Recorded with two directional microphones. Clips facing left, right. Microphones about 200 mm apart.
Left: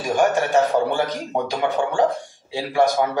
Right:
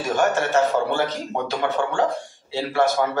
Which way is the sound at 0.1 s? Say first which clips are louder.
Left 2 dB; 15° left (ahead or behind).